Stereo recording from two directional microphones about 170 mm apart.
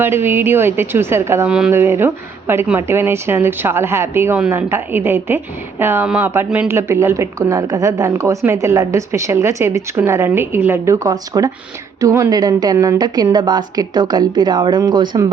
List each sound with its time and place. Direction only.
0.0 s a woman's voice: 15° right (ahead or behind)